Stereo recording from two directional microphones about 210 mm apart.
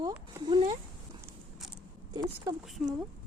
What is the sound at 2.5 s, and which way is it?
Speech, 15° right (ahead or behind).